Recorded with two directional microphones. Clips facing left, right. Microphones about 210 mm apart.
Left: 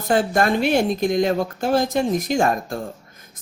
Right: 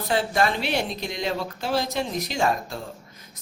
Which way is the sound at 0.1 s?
50° left (ahead or behind).